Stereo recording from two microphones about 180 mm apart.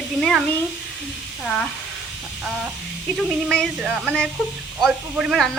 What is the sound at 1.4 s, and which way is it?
Speech, 5° left (ahead or behind).